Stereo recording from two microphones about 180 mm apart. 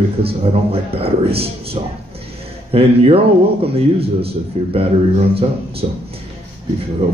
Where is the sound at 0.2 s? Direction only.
35° right (ahead or behind).